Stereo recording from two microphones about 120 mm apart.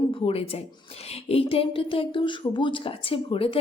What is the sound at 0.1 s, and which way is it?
Speech, 50° left (ahead or behind).